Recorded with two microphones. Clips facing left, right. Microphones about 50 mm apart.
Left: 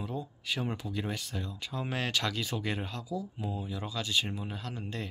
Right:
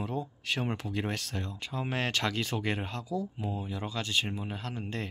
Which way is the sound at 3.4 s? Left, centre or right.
Right.